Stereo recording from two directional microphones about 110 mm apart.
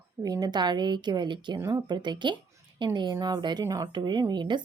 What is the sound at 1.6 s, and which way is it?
Speech, 25° right (ahead or behind).